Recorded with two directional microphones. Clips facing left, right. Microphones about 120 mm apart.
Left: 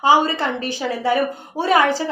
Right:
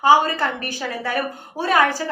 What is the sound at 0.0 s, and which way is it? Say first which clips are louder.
A woman's voice: even; 15° left (ahead or behind).